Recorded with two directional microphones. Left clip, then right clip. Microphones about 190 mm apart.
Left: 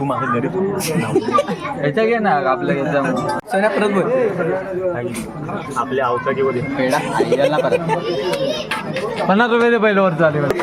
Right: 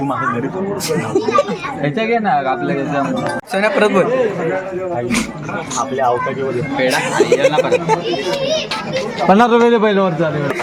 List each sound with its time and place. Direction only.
2.0 s a man's voice: 5° right (ahead or behind)
3.5 s speech: 15° right (ahead or behind)
7.3 s speech: 20° right (ahead or behind)
9.3 s a man's voice: 45° right (ahead or behind)